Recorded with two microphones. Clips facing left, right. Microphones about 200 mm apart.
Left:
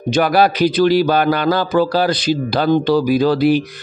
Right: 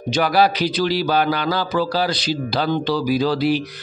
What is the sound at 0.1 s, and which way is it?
Speech, 50° left (ahead or behind).